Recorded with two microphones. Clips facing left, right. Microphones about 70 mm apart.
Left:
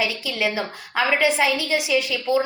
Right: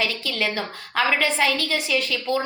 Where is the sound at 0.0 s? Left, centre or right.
Centre.